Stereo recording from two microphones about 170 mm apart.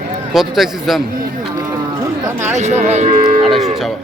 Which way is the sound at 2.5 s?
45° right (ahead or behind).